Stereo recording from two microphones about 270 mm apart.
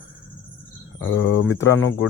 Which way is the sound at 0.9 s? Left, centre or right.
Left.